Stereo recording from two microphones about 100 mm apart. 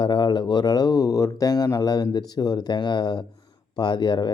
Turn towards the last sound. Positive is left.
turn(degrees=50)  # may be behind; listen again after turning